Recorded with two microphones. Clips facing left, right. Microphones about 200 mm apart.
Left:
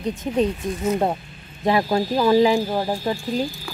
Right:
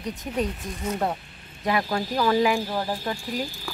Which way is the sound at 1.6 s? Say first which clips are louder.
Left 6 dB; 25° left (ahead or behind).